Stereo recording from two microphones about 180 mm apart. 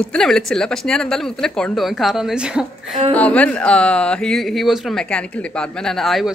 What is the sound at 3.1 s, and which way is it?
Speech, 5° left (ahead or behind).